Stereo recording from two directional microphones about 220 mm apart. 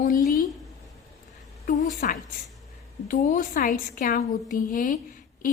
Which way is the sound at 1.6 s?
35° left (ahead or behind).